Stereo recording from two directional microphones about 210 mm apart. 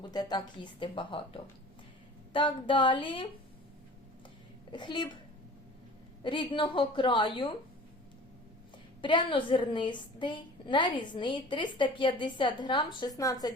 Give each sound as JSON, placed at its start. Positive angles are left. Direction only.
{"t": 0.0, "sound": "a woman's voice", "side_deg": 20}
{"t": 4.7, "sound": "a woman's voice", "side_deg": 20}
{"t": 6.2, "sound": "a woman's voice", "side_deg": 20}
{"t": 9.0, "sound": "a woman's voice", "side_deg": 20}